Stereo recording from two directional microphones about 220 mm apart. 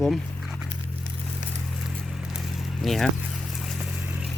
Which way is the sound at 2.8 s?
Centre (ahead or behind).